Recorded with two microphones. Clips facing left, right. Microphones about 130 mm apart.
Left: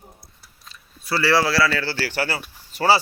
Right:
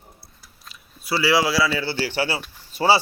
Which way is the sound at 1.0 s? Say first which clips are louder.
Even; 15° right (ahead or behind).